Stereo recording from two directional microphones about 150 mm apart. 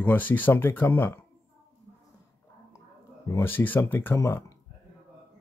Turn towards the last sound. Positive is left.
turn(degrees=20)  # may be behind; listen again after turning